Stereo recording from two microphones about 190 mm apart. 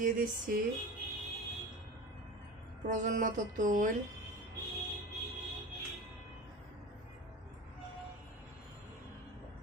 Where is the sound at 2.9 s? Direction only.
45° right (ahead or behind).